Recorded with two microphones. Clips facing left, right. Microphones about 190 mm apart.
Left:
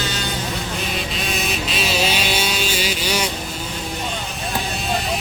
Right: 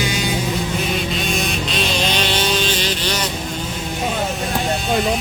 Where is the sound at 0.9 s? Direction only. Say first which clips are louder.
Right 4 dB; centre (ahead or behind).